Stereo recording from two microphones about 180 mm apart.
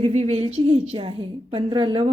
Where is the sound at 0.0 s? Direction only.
35° right (ahead or behind).